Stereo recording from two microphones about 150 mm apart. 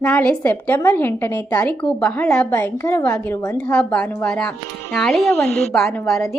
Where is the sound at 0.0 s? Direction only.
5° left (ahead or behind).